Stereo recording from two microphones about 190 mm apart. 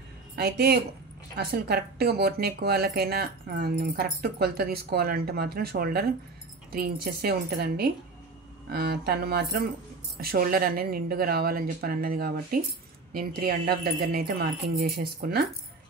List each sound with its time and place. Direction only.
0.4 s speech: 55° right (ahead or behind)